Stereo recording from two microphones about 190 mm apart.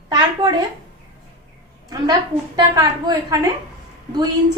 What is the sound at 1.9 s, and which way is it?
A woman's voice, 20° right (ahead or behind).